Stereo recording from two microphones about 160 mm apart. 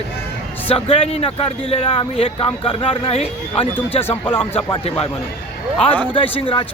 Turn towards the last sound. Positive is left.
turn(degrees=35)  # may be behind; listen again after turning